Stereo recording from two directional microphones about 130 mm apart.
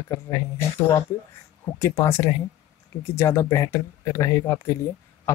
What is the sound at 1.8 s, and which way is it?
Speech, 20° left (ahead or behind).